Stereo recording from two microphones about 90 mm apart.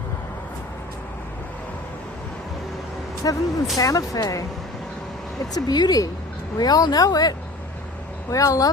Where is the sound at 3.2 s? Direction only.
45° left (ahead or behind).